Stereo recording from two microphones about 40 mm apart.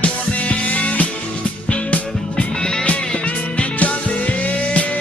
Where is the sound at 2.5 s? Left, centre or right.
Centre.